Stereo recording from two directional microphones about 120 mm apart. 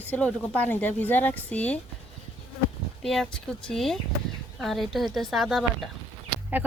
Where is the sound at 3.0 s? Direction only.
5° left (ahead or behind).